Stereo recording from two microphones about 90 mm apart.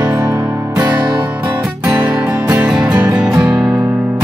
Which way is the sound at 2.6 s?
10° right (ahead or behind).